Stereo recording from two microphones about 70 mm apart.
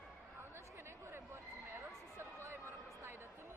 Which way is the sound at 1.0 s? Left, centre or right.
Right.